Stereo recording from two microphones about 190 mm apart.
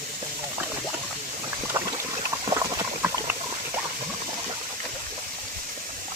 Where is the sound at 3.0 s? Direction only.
10° right (ahead or behind).